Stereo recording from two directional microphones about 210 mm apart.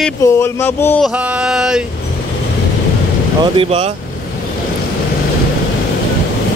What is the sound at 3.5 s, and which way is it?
Speech, 25° right (ahead or behind).